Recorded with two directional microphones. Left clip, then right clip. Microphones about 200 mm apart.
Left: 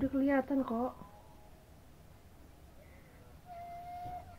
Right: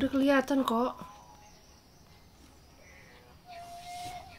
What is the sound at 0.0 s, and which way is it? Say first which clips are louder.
Speech: right 5 dB; 35° right (ahead or behind).